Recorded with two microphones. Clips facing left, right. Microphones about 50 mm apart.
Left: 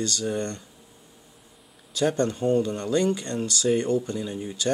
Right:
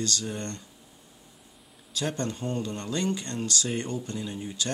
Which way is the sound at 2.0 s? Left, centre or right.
Left.